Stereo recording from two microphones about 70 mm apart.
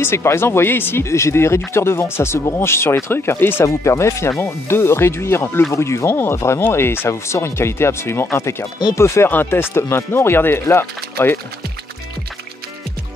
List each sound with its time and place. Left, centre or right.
0.0 s speech: left
3.6 s speech: left
9.3 s speech: left